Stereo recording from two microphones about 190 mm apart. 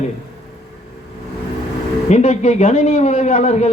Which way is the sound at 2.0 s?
35° left (ahead or behind).